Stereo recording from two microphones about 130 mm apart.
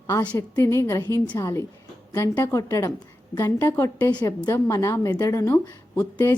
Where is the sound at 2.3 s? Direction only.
25° left (ahead or behind).